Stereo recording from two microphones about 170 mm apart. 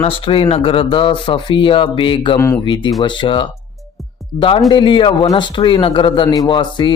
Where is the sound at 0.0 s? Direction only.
35° left (ahead or behind).